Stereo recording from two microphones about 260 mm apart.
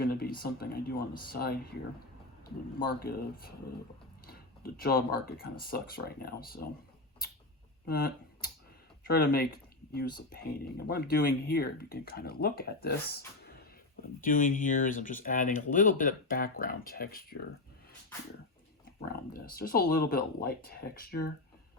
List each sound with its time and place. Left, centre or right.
0.0 s speech: left
7.9 s speech: left
19.0 s speech: left